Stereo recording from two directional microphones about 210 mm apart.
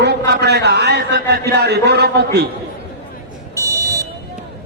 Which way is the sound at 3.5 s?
15° right (ahead or behind).